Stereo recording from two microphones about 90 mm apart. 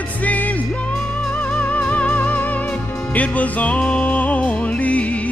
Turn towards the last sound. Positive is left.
turn(degrees=15)  # may be behind; listen again after turning